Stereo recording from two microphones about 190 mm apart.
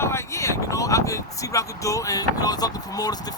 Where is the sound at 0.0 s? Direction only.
15° left (ahead or behind).